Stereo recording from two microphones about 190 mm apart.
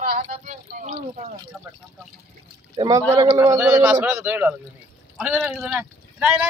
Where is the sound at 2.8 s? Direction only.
20° right (ahead or behind).